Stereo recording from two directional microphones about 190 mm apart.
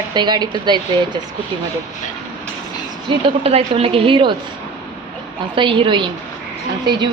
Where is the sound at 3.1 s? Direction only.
30° right (ahead or behind).